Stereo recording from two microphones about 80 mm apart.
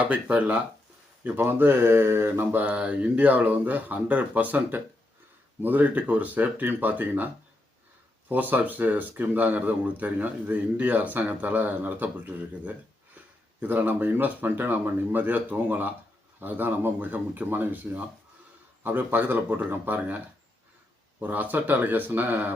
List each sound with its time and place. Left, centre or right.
0.0 s speech: centre
8.3 s speech: right